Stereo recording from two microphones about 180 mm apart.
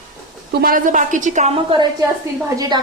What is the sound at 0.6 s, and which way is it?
Speech, 50° right (ahead or behind).